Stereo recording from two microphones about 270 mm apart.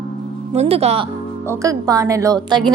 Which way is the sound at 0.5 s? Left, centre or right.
Right.